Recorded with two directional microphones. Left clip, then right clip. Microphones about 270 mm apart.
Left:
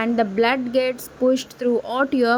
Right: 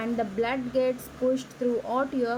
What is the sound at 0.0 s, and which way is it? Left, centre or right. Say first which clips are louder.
A woman's voice: left 9 dB; left.